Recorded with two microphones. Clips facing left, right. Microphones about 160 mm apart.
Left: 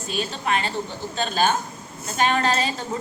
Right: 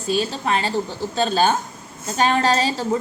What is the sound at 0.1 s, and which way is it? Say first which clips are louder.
A woman's voice: right 4 dB; 35° right (ahead or behind).